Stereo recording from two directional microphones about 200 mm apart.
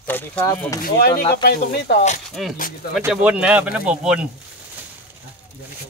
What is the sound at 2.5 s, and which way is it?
Speech, 45° left (ahead or behind).